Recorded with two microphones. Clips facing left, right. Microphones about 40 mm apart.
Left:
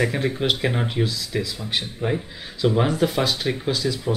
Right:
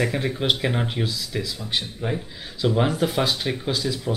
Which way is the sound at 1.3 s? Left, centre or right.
Centre.